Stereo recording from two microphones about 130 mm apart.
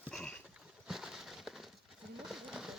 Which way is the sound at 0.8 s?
Centre (ahead or behind).